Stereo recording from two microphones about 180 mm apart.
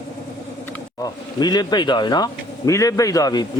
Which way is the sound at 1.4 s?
20° left (ahead or behind).